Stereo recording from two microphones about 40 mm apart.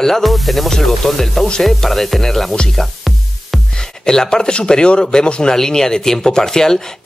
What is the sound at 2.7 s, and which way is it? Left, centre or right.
Music, centre.